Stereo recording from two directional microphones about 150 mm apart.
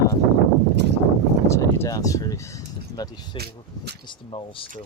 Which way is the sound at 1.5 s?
20° left (ahead or behind).